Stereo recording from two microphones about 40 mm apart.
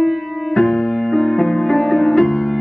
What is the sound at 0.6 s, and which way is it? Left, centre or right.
Music, centre.